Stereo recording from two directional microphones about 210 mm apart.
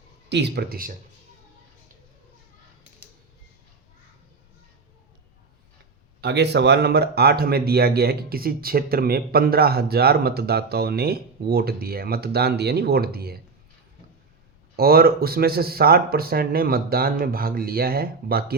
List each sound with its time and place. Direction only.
0.3 s speech: 55° right (ahead or behind)
6.2 s speech: 55° right (ahead or behind)
14.8 s speech: 45° right (ahead or behind)